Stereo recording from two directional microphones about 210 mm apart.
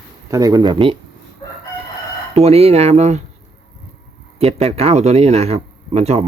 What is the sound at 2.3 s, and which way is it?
Speech, 30° right (ahead or behind).